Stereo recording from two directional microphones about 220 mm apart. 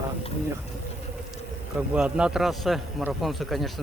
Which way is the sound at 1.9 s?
5° right (ahead or behind).